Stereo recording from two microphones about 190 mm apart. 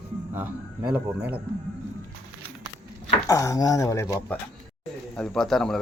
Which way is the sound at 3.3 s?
20° left (ahead or behind).